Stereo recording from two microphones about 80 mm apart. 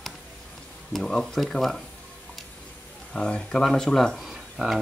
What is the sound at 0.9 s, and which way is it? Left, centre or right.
Speech, centre.